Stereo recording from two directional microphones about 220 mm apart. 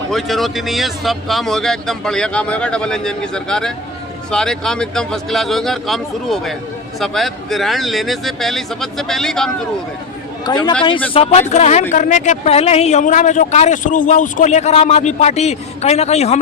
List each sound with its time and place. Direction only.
0.1 s speech: centre (ahead or behind)
10.4 s a man's voice: 20° left (ahead or behind)